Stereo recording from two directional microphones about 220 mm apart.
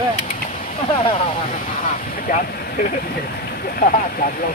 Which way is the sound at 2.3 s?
40° left (ahead or behind).